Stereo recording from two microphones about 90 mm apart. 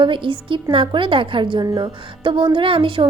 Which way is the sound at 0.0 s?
70° right (ahead or behind).